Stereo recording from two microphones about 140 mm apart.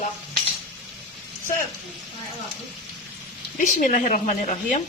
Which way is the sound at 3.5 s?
65° left (ahead or behind).